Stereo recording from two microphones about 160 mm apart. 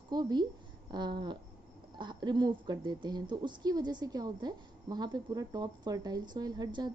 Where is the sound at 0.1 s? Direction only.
25° right (ahead or behind).